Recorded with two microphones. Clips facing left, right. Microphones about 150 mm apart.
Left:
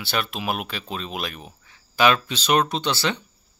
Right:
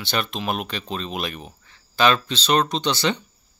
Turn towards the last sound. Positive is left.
turn(degrees=5)  # may be behind; listen again after turning